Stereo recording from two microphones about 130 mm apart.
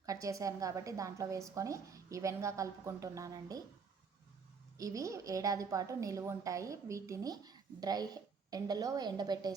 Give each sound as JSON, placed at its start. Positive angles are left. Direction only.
{"t": 0.0, "sound": "a woman's voice", "side_deg": -25}
{"t": 4.8, "sound": "a woman's voice", "side_deg": -25}